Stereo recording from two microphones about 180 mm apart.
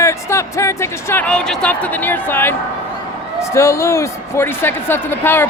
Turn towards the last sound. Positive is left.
turn(degrees=10)  # may be behind; listen again after turning